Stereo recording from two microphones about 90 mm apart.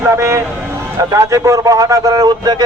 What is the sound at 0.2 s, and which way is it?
A man's voice, 35° right (ahead or behind).